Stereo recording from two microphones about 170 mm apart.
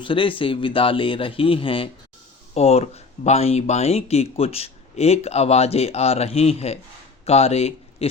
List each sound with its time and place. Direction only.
0.0 s a man's voice: 30° left (ahead or behind)